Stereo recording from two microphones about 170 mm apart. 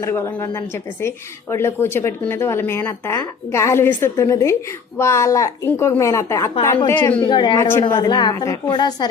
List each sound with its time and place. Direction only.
0.0 s a woman's voice: 15° left (ahead or behind)
7.2 s a woman's voice: 25° left (ahead or behind)
7.7 s a woman's voice: 15° left (ahead or behind)
7.9 s a woman's voice: 25° left (ahead or behind)